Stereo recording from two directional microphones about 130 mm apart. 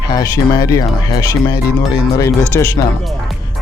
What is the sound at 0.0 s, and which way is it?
Speech, 30° left (ahead or behind).